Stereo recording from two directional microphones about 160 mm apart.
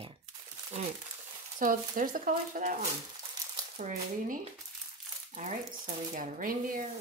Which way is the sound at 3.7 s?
55° right (ahead or behind).